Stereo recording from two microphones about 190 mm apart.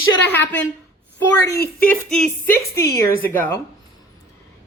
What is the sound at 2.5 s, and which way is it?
A woman's voice, 15° left (ahead or behind).